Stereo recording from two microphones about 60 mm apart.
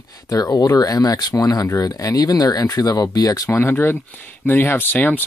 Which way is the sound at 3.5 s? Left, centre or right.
Left.